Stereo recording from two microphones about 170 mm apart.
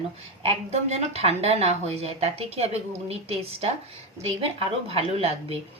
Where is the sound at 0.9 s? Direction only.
35° right (ahead or behind).